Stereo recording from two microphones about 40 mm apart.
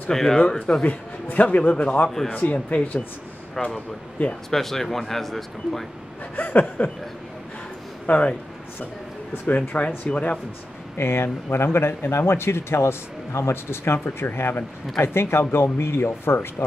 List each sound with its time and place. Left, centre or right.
0.1 s speech: centre
0.7 s a man's voice: left
1.3 s a man's voice: left
1.6 s speech: left
3.6 s speech: centre
6.3 s chuckle: left
8.1 s speech: left
9.7 s speech: left
11.0 s speech: left
11.4 s speech: left
15.0 s speech: left